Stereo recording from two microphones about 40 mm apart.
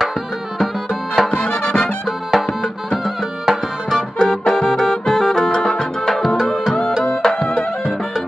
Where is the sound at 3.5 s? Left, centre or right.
Centre.